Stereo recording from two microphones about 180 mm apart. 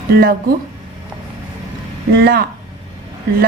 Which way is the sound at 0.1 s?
55° right (ahead or behind).